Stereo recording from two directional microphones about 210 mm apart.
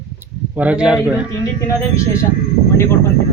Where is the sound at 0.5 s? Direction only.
5° right (ahead or behind).